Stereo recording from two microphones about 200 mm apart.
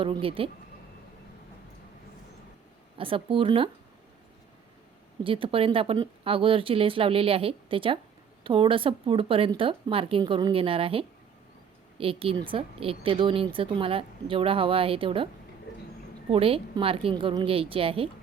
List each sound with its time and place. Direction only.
0.0 s a woman's voice: 25° right (ahead or behind)
3.0 s a woman's voice: 25° right (ahead or behind)
5.2 s a woman's voice: 25° right (ahead or behind)
16.3 s a woman's voice: 30° right (ahead or behind)